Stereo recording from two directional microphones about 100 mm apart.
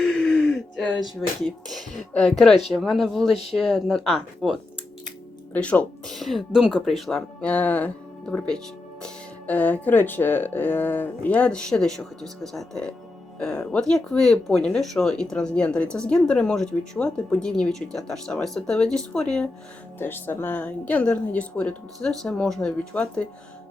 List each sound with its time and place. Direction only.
0.0 s a sound: 5° left (ahead or behind)
2.1 s speech: 5° left (ahead or behind)
5.5 s speech: 10° left (ahead or behind)
20.0 s speech: 20° left (ahead or behind)